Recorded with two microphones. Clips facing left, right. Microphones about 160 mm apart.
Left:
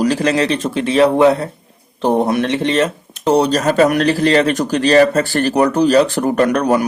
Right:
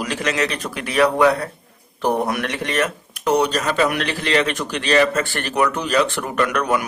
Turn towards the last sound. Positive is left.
turn(degrees=35)  # may be behind; listen again after turning